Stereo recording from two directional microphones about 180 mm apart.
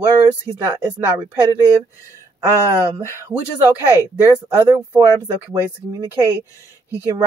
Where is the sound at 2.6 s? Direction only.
15° right (ahead or behind).